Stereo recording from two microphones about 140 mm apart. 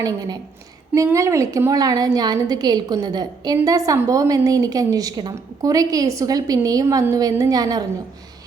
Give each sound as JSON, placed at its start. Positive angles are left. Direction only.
{"t": 0.0, "sound": "a woman's voice", "side_deg": -30}